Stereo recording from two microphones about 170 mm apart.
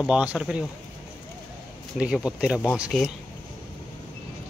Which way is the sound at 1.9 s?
5° right (ahead or behind).